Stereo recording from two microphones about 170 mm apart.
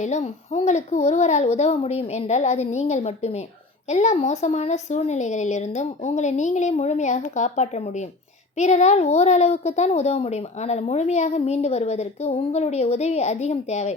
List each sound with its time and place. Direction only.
0.0 s a woman's voice: 45° left (ahead or behind)